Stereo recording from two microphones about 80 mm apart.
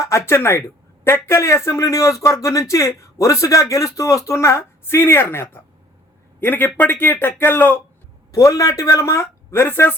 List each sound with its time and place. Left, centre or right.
0.0 s a man's voice: left
8.3 s speech: left